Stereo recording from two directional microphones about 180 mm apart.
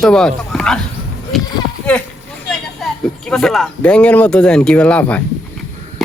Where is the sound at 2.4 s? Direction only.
5° left (ahead or behind).